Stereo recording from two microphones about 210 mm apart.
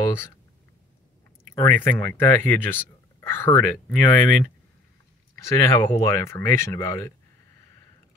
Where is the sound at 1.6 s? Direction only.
10° left (ahead or behind).